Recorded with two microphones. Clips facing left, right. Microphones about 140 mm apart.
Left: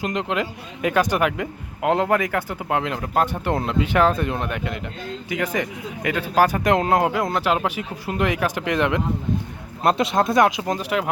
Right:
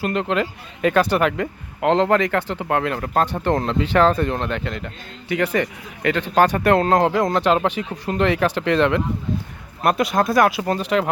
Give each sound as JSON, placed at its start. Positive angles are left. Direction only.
{"t": 0.0, "sound": "speech", "side_deg": 15}
{"t": 9.8, "sound": "speech", "side_deg": 25}